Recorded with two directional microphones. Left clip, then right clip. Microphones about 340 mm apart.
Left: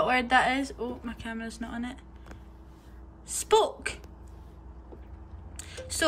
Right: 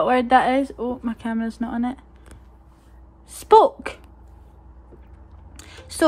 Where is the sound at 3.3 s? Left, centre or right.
Centre.